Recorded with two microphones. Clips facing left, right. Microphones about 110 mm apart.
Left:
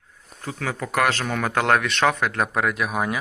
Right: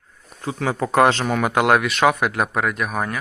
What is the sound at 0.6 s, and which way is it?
Speech, 30° right (ahead or behind).